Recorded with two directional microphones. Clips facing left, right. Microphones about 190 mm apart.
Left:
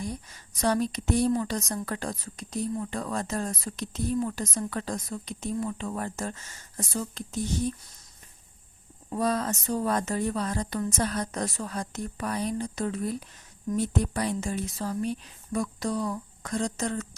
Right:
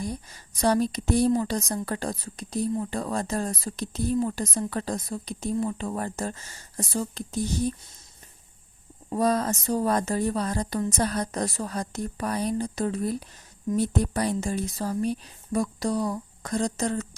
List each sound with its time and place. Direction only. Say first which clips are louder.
0.0 s a woman's voice: right 2 dB; 35° right (ahead or behind)
9.1 s a woman's voice: right 3 dB; 40° right (ahead or behind)